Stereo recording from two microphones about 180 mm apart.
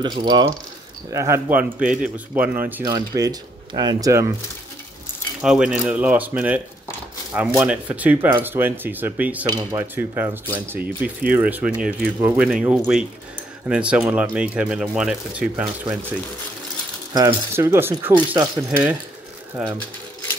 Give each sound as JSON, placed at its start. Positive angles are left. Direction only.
{"t": 0.0, "sound": "speech", "side_deg": -25}
{"t": 5.4, "sound": "speech", "side_deg": -5}
{"t": 17.1, "sound": "speech", "side_deg": -20}